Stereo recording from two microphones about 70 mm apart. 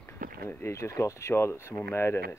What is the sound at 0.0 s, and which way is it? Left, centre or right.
Speech, left.